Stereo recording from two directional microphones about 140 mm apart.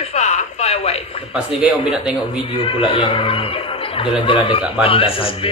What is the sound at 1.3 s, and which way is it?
Speech, 5° right (ahead or behind).